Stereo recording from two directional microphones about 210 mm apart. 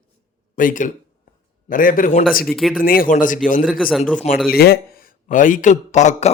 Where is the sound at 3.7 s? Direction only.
Centre (ahead or behind).